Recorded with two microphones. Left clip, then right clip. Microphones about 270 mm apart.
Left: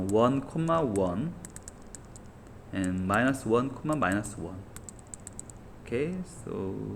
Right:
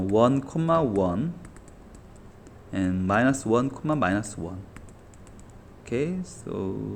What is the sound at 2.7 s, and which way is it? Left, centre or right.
Speech, right.